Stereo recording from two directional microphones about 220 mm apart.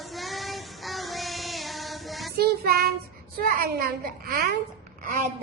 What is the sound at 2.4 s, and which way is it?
Child singing, 45° right (ahead or behind).